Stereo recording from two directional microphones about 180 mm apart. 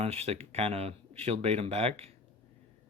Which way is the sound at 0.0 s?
35° right (ahead or behind).